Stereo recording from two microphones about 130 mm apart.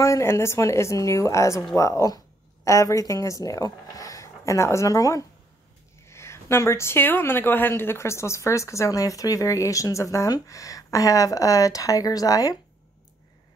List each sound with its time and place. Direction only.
0.0 s speech: 20° left (ahead or behind)